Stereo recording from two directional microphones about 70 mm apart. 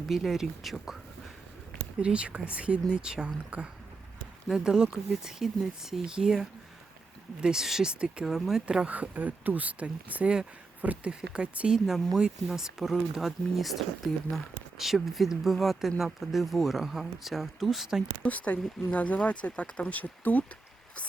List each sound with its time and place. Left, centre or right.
0.1 s speech: centre
2.0 s speech: centre
18.2 s speech: centre